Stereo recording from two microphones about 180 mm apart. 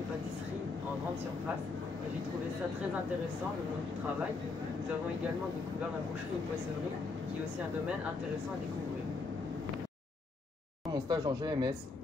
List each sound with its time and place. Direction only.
10.9 s speech: 25° right (ahead or behind)